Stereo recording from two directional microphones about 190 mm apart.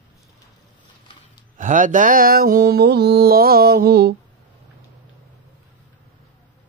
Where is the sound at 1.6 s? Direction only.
40° right (ahead or behind).